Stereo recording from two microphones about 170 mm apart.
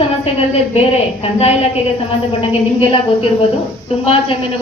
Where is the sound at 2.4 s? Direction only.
35° left (ahead or behind).